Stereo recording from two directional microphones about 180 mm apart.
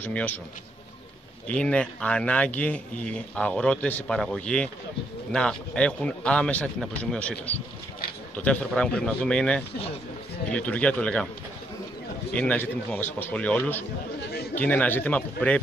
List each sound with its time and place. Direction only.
0.0 s a man's voice: 10° left (ahead or behind)
1.5 s a man's voice: 5° left (ahead or behind)
12.3 s a man's voice: 5° left (ahead or behind)